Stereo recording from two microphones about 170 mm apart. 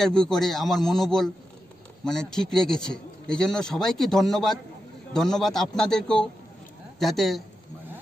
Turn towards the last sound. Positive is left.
turn(degrees=0)  # may be behind; listen again after turning